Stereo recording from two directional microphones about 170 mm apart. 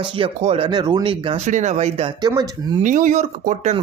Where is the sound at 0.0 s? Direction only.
30° right (ahead or behind).